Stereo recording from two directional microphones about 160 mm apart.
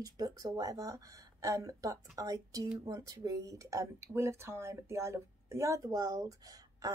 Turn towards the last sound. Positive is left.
turn(degrees=-20)  # may be behind; listen again after turning